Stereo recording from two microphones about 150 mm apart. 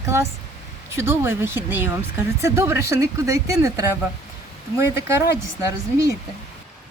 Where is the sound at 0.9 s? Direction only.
15° right (ahead or behind).